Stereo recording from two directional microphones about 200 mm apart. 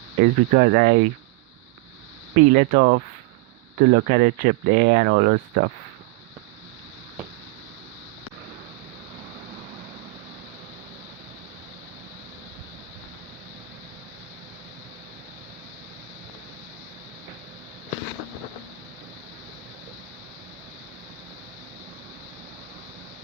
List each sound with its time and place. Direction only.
0.2 s speech: 45° right (ahead or behind)
2.3 s speech: 40° right (ahead or behind)